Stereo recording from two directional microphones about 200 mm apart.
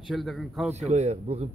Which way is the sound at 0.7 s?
35° right (ahead or behind).